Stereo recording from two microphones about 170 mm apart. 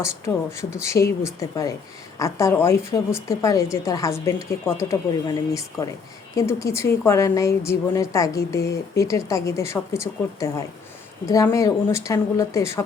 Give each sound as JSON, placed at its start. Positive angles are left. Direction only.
{"t": 0.5, "sound": "a woman's voice", "side_deg": 15}